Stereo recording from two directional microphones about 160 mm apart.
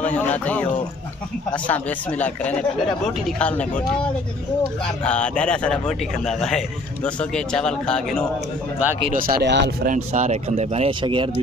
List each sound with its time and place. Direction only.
0.0 s a man's voice: 10° left (ahead or behind)
5.0 s a man's voice: 10° left (ahead or behind)
9.1 s speech: 60° right (ahead or behind); by 9.9 s 90° right
9.9 s speech: 50° right (ahead or behind); by 11.4 s 30° right (ahead or behind)